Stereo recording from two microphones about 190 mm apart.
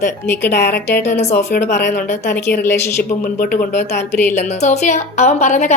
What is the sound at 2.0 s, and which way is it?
Speech, 50° left (ahead or behind).